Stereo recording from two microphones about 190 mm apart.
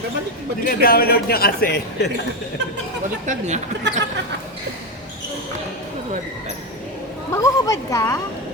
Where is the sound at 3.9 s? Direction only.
65° right (ahead or behind).